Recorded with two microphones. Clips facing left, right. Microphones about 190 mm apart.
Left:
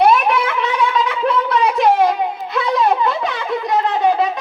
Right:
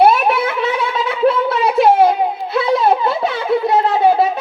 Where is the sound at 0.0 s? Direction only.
35° right (ahead or behind).